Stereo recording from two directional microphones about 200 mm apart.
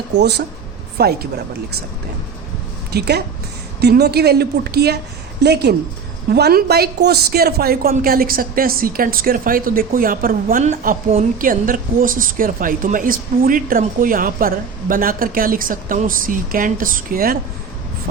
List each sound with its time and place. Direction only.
0.2 s a woman's voice: 55° right (ahead or behind)
2.9 s a woman's voice: 55° right (ahead or behind)